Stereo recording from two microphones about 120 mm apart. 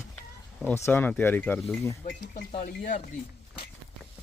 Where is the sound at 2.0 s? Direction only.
90° left.